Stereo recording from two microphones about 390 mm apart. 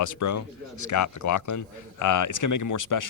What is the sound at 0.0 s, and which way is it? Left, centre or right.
A man's voice, left.